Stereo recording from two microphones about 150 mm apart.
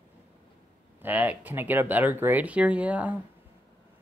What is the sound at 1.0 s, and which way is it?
Speech, 10° right (ahead or behind).